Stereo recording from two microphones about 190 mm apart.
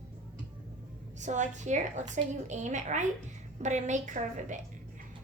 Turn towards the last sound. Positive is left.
turn(degrees=-40)  # may be behind; listen again after turning